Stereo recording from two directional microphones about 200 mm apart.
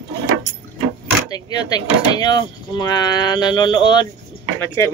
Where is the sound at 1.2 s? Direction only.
20° left (ahead or behind).